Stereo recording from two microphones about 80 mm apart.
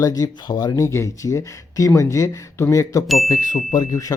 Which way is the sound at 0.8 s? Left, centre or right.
Left.